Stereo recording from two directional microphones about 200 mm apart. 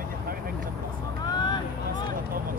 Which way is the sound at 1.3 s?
20° left (ahead or behind).